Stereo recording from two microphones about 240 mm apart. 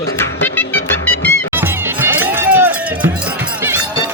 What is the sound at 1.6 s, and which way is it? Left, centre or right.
Music, centre.